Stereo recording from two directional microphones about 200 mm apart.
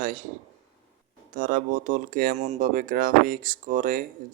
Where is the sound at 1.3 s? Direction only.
40° right (ahead or behind).